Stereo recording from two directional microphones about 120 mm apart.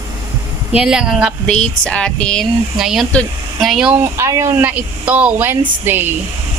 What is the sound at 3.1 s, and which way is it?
Speech, 10° left (ahead or behind).